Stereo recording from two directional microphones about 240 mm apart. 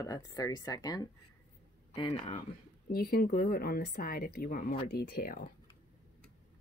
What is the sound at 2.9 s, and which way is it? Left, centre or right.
A woman's voice, left.